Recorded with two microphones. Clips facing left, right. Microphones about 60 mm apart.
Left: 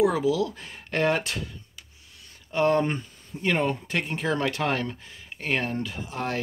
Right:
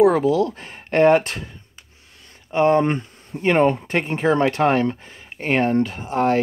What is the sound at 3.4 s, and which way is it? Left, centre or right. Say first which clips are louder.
Speech: right 8 dB; right.